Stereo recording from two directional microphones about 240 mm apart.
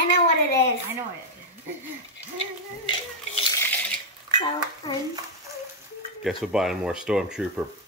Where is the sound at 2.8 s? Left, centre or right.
Centre.